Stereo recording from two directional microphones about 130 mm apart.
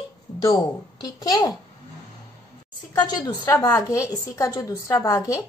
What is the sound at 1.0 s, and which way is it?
Speech, 30° left (ahead or behind).